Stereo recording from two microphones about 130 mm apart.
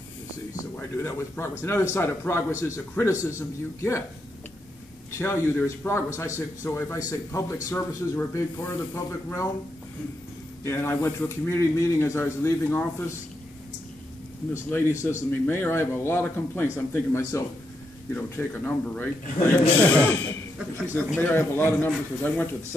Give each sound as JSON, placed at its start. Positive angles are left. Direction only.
{"t": 0.7, "sound": "a man's voice", "side_deg": 15}
{"t": 5.1, "sound": "speech", "side_deg": 20}
{"t": 10.6, "sound": "speech", "side_deg": 20}
{"t": 14.5, "sound": "a man's voice", "side_deg": 20}